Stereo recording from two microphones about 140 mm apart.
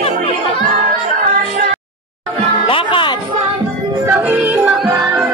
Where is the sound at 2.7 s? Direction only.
40° left (ahead or behind).